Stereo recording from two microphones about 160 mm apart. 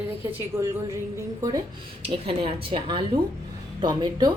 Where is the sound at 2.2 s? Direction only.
35° right (ahead or behind).